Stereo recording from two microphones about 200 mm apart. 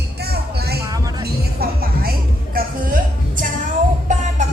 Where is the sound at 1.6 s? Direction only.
50° right (ahead or behind).